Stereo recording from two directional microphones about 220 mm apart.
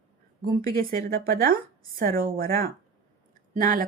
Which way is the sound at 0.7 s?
40° right (ahead or behind).